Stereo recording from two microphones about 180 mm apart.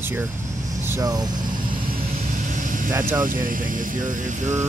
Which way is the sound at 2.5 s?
45° right (ahead or behind).